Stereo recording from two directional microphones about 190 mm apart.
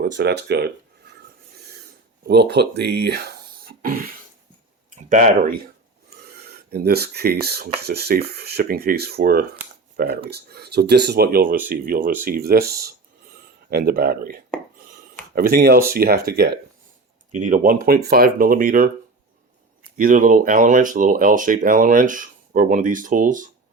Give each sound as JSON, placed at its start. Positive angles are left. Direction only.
{"t": 0.0, "sound": "speech", "side_deg": -60}
{"t": 2.2, "sound": "speech", "side_deg": -60}
{"t": 6.2, "sound": "speech", "side_deg": -55}
{"t": 13.7, "sound": "speech", "side_deg": -55}
{"t": 15.4, "sound": "speech", "side_deg": -55}
{"t": 17.3, "sound": "speech", "side_deg": -40}
{"t": 20.0, "sound": "speech", "side_deg": -45}